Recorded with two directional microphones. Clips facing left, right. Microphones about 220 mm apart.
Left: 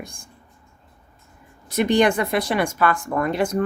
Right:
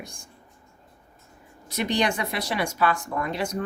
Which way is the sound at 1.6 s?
50° left (ahead or behind).